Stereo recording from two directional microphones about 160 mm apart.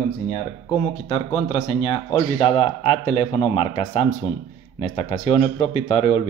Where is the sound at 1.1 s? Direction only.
40° left (ahead or behind).